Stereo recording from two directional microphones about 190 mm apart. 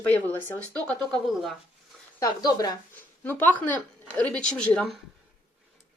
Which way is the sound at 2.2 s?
20° left (ahead or behind).